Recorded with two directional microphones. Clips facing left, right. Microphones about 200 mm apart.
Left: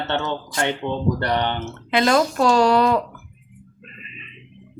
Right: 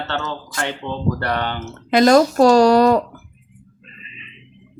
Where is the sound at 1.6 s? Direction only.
40° right (ahead or behind).